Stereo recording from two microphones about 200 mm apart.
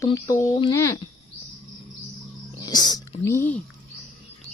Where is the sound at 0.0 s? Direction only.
15° left (ahead or behind).